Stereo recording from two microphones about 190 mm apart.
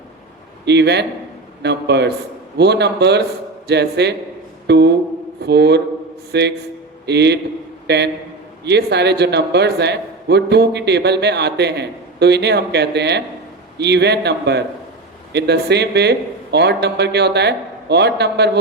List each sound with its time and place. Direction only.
0.6 s a man's voice: 65° right (ahead or behind)